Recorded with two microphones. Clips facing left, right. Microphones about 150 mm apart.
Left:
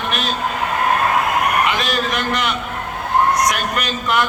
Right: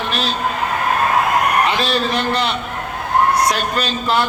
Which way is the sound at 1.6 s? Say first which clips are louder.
Right 2 dB; 30° right (ahead or behind).